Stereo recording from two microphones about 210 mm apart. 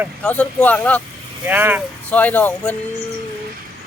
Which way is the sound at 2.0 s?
5° left (ahead or behind).